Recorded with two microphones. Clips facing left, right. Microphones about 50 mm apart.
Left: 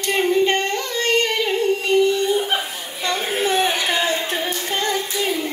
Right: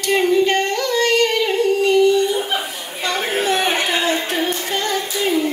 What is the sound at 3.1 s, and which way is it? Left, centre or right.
Music, right.